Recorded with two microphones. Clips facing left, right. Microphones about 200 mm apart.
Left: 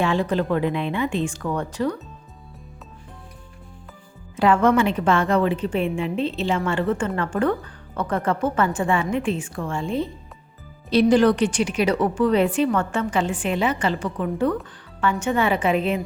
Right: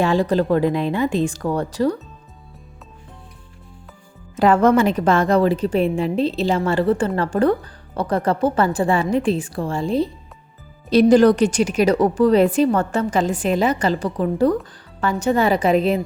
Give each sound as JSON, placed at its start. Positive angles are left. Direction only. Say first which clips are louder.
{"t": 0.0, "sound": "a woman's voice", "louder": "right 4 dB", "side_deg": -40}
{"t": 4.4, "sound": "a woman's voice", "louder": "right 3 dB", "side_deg": -40}